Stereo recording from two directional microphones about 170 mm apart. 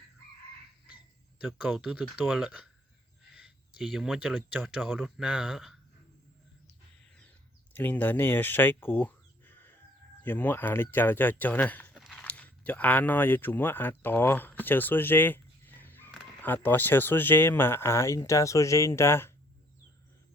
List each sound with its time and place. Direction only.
1.4 s speech: centre (ahead or behind)
7.7 s speech: 10° left (ahead or behind)
11.9 s a sound: 5° right (ahead or behind)
12.2 s speech: 10° left (ahead or behind)